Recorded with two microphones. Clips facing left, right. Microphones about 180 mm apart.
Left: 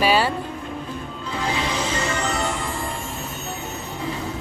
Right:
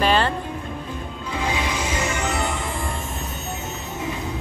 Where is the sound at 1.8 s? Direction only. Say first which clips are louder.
Left 1 dB; 10° right (ahead or behind).